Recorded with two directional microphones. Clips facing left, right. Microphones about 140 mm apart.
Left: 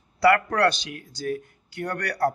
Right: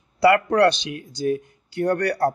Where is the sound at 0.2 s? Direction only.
20° right (ahead or behind).